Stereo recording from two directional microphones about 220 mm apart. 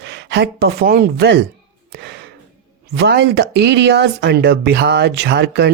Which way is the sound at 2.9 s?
50° right (ahead or behind).